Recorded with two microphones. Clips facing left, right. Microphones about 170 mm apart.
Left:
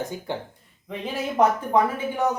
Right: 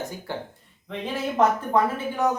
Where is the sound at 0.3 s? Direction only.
20° left (ahead or behind).